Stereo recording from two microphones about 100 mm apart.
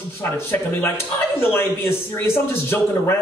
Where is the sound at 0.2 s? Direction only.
25° left (ahead or behind).